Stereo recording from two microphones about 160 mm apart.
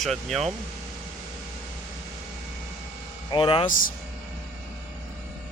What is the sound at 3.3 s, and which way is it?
Speech, 35° left (ahead or behind).